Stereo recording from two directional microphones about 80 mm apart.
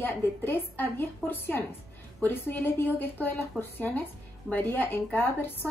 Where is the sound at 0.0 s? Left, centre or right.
Left.